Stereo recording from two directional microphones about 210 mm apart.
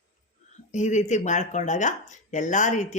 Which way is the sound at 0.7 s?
35° left (ahead or behind).